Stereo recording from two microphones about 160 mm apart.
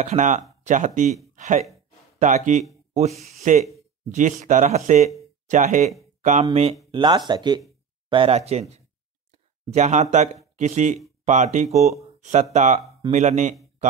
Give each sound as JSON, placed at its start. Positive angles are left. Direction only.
{"t": 0.0, "sound": "speech", "side_deg": -50}
{"t": 1.3, "sound": "a sound", "side_deg": -50}
{"t": 2.1, "sound": "speech", "side_deg": -50}
{"t": 6.9, "sound": "speech", "side_deg": -30}